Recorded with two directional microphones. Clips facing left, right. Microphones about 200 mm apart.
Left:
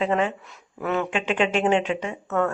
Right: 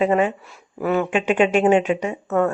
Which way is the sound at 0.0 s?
10° right (ahead or behind).